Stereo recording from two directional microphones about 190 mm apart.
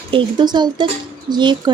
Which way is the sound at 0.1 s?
25° right (ahead or behind).